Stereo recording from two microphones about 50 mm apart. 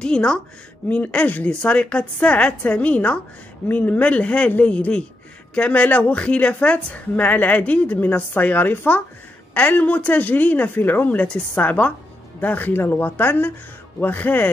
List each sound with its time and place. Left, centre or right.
0.0 s a woman's voice: centre; by 14.5 s left